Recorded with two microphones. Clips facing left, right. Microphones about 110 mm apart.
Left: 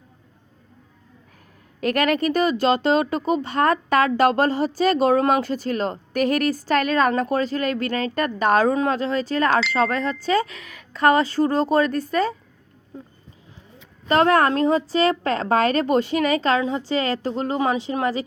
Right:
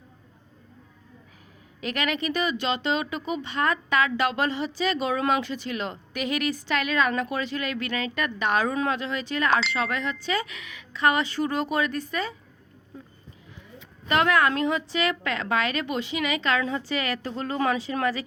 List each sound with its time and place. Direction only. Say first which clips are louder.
1.8 s speech: left 8 dB; 45° left (ahead or behind)
14.1 s speech: left 5 dB; 35° left (ahead or behind)